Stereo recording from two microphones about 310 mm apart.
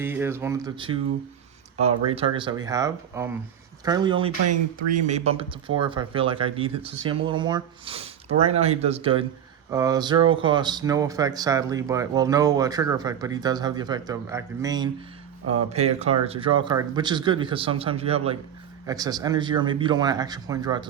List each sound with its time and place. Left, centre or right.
0.0 s speech: centre
2.1 s speech: centre